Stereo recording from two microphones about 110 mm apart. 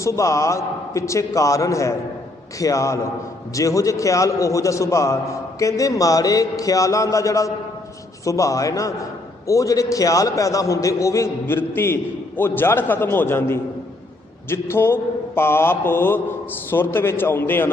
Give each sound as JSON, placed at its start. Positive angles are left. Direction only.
{"t": 0.0, "sound": "a man's voice", "side_deg": 30}